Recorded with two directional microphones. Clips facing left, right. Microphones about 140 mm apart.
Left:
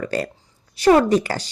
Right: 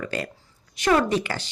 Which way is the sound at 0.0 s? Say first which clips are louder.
Left 5 dB; 35° left (ahead or behind).